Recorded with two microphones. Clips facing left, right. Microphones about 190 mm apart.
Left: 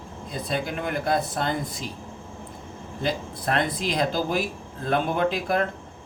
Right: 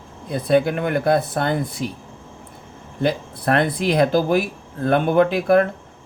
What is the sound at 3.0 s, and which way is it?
Speech, 60° right (ahead or behind).